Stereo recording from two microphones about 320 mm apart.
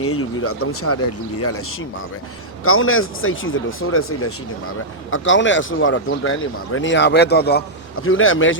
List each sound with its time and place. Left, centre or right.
0.0 s speech: left
2.6 s speech: left